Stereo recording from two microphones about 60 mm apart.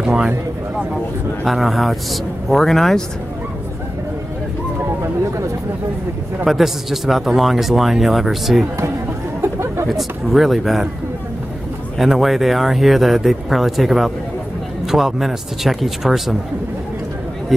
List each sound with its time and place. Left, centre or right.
0.0 s speech: centre
1.4 s a man's voice: centre
6.4 s a man's voice: centre
9.4 s chatter: right
9.8 s a man's voice: centre
12.0 s a man's voice: centre
17.5 s a man's voice: centre